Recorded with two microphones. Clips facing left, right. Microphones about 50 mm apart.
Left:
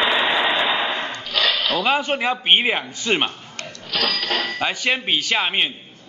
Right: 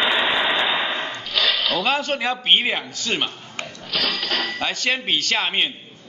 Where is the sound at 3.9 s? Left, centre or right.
Centre.